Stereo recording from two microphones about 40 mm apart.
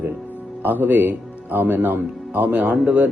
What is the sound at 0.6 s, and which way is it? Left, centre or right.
Speech, right.